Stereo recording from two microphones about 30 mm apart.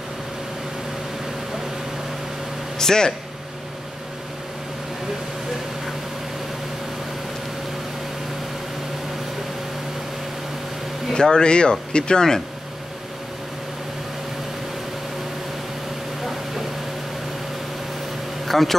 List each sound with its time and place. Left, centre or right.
2.8 s speech: centre
11.1 s speech: left
18.5 s a man's voice: centre